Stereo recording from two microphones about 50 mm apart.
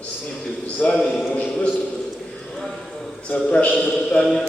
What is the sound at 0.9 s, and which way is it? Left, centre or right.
Speech, centre.